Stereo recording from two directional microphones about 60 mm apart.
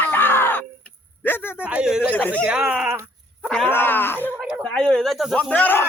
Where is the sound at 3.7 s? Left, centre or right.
Left.